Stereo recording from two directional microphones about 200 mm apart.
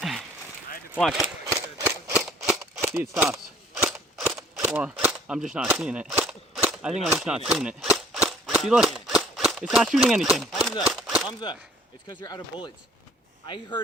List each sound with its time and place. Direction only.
0.0 s a sound: centre (ahead or behind)
0.9 s speech: 5° left (ahead or behind)
1.8 s cap gun: 10° right (ahead or behind)
2.5 s a sound: centre (ahead or behind)
2.9 s speech: 10° right (ahead or behind)
3.8 s cap gun: centre (ahead or behind)
11.3 s speech: 20° left (ahead or behind)